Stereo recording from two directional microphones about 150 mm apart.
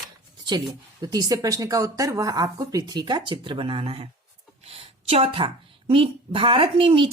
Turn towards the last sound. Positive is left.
turn(degrees=-35)  # may be behind; listen again after turning